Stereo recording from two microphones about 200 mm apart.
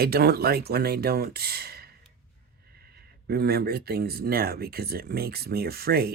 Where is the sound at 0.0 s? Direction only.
50° right (ahead or behind).